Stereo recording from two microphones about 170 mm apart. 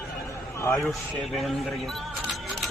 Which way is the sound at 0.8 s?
Centre (ahead or behind).